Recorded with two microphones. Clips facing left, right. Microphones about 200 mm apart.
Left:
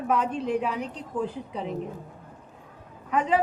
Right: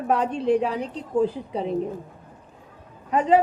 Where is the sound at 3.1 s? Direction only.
35° right (ahead or behind).